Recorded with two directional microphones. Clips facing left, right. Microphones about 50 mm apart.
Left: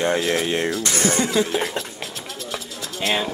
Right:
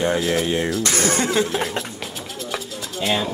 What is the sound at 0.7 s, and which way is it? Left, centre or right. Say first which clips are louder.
Speech: right 1 dB; centre.